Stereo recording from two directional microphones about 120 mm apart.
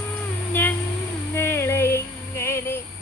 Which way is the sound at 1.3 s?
20° left (ahead or behind).